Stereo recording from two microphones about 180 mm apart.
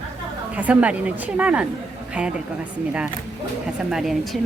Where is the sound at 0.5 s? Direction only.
10° right (ahead or behind).